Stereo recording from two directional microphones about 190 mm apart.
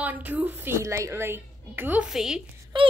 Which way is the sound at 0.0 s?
10° right (ahead or behind).